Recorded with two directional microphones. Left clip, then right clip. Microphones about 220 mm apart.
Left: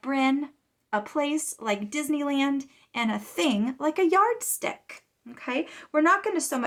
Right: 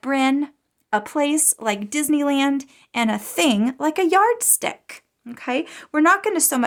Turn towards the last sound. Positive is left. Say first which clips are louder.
# right 5 dB
turn(degrees=-50)  # may be behind; listen again after turning